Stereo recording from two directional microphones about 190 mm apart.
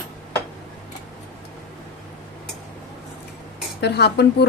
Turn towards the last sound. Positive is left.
turn(degrees=60)  # may be behind; listen again after turning